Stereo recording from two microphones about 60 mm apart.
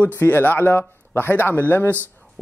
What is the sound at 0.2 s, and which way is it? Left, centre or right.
Speech, left.